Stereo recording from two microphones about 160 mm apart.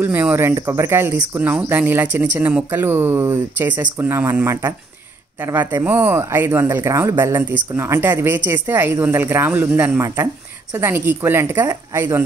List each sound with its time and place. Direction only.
0.0 s speech: 15° right (ahead or behind)